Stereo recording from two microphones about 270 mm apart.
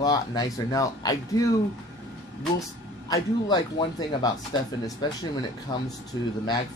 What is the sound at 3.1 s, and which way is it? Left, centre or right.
Speech, centre.